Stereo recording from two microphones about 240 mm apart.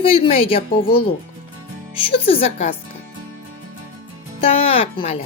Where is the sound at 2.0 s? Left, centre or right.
Left.